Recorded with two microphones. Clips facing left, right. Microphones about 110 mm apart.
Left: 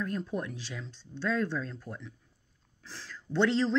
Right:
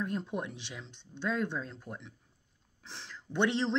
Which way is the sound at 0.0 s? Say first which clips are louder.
Left 1 dB; 20° right (ahead or behind).